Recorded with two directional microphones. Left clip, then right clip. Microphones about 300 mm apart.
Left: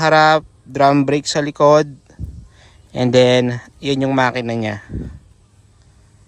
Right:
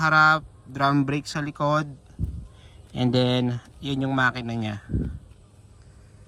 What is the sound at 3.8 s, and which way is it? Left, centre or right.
Speech, centre.